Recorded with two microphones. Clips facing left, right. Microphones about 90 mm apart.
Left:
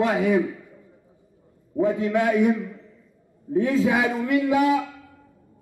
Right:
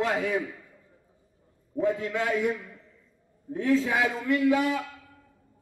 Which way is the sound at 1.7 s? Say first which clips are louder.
Left 5 dB; 15° left (ahead or behind).